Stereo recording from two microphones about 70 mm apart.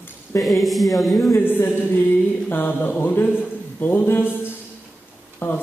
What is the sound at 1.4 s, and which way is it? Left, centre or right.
A man's voice, left.